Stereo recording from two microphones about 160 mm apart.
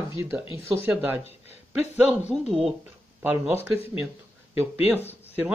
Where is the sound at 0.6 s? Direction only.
15° right (ahead or behind).